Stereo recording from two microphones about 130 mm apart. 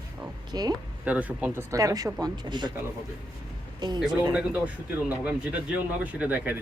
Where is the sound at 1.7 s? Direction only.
25° right (ahead or behind).